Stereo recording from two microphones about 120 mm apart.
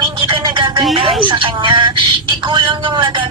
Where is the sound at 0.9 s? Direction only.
45° right (ahead or behind).